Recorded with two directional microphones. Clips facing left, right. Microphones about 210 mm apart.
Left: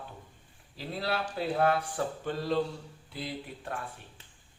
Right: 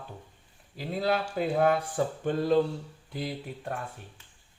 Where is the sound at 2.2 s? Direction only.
50° right (ahead or behind).